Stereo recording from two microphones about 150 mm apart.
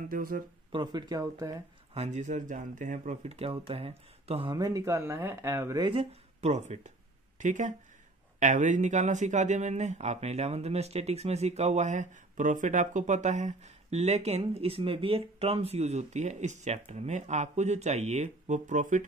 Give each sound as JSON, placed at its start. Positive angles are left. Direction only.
{"t": 0.1, "sound": "speech", "side_deg": -70}
{"t": 0.7, "sound": "speech", "side_deg": -30}
{"t": 2.0, "sound": "speech", "side_deg": -55}
{"t": 4.6, "sound": "speech", "side_deg": -25}
{"t": 6.4, "sound": "speech", "side_deg": -50}